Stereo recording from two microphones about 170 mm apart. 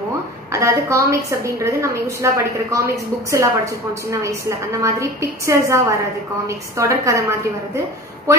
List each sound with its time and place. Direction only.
0.5 s a woman's voice: 15° right (ahead or behind)